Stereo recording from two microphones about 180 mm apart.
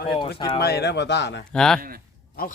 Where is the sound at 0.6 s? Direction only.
65° left (ahead or behind).